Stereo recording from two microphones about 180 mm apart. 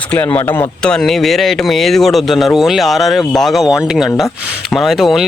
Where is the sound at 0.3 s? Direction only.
10° left (ahead or behind).